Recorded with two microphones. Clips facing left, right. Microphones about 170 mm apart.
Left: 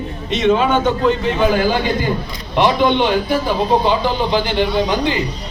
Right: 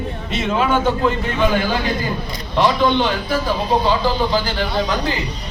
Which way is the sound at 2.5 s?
15° left (ahead or behind).